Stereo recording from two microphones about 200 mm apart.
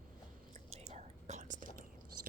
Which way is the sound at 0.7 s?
35° right (ahead or behind).